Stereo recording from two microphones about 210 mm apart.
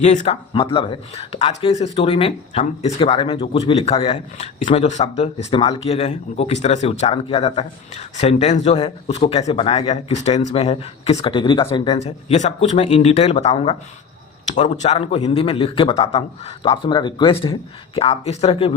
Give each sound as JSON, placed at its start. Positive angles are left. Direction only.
{"t": 0.0, "sound": "speech", "side_deg": 35}